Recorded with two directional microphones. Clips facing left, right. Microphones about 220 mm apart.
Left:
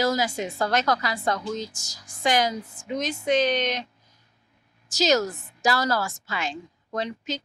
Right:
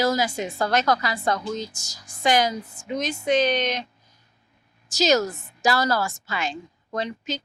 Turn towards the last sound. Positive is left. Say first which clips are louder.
# right 1 dB
turn(degrees=-10)  # may be behind; listen again after turning